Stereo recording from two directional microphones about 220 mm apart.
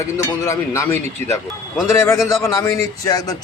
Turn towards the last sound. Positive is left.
turn(degrees=15)  # may be behind; listen again after turning